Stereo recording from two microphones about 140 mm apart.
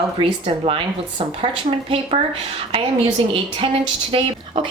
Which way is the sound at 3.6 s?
40° right (ahead or behind).